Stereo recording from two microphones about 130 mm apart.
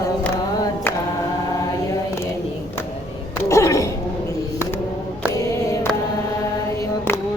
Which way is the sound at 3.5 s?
25° left (ahead or behind).